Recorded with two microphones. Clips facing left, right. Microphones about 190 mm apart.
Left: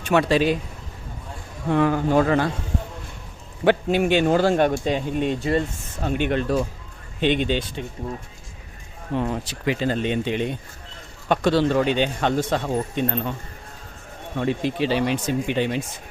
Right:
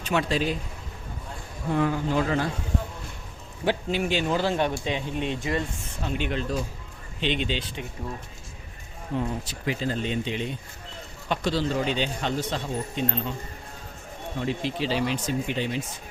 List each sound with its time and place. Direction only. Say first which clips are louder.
0.0 s a man's voice: left 6 dB; 60° left (ahead or behind)
1.7 s a man's voice: left 6 dB; 60° left (ahead or behind)
3.6 s speech: left 7 dB; 60° left (ahead or behind); by 5.6 s 35° left (ahead or behind)
6.0 s a man's voice: left 6 dB; 55° left (ahead or behind)
9.1 s a man's voice: left 4 dB; 70° left (ahead or behind)
14.3 s a man's voice: left 5 dB; 60° left (ahead or behind)